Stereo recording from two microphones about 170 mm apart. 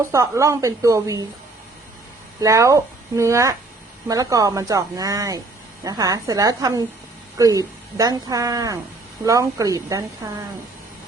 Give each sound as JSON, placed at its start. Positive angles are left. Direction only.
{"t": 0.0, "sound": "a woman's voice", "side_deg": -15}
{"t": 2.4, "sound": "a woman's voice", "side_deg": -20}